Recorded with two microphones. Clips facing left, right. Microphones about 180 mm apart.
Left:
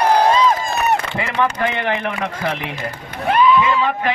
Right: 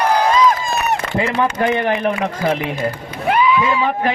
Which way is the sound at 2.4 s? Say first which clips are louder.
Right 6 dB; 45° right (ahead or behind).